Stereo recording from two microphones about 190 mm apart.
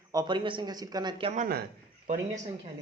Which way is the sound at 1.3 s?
40° right (ahead or behind).